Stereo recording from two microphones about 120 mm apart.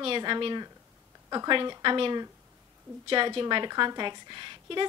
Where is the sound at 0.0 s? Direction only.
45° right (ahead or behind).